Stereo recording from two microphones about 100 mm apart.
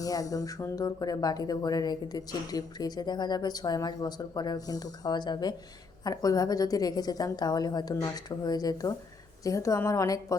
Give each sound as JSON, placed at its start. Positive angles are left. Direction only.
{"t": 0.0, "sound": "speech", "side_deg": 35}